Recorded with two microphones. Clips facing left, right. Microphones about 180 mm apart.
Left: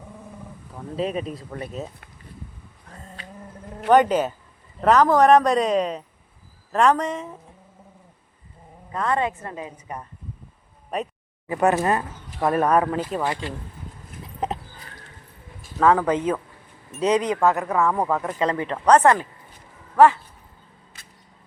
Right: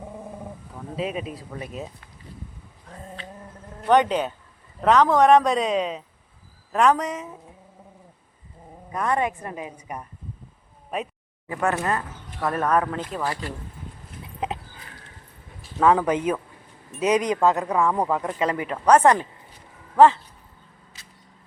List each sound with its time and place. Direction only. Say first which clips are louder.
0.9 s a man's voice: left 3 dB; 5° right (ahead or behind)
3.8 s a man's voice: left 2 dB; 5° left (ahead or behind)
8.9 s a woman's voice: even; 15° right (ahead or behind)
11.4 s speech: left 4 dB; 20° left (ahead or behind)
15.8 s a woman's voice: left 1 dB; 15° right (ahead or behind)
20.9 s a sound: even; 55° left (ahead or behind)